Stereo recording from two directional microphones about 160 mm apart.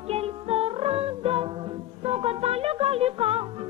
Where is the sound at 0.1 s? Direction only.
40° right (ahead or behind).